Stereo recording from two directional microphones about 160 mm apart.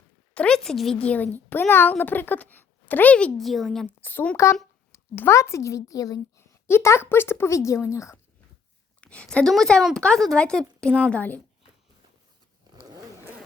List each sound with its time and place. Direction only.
0.3 s a child's voice: 5° left (ahead or behind)
3.8 s a child's voice: 10° left (ahead or behind)
9.0 s a woman's voice: 5° left (ahead or behind)
12.9 s zipper: 20° right (ahead or behind)